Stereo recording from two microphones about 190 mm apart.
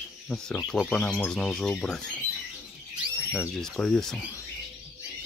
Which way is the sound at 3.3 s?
5° left (ahead or behind).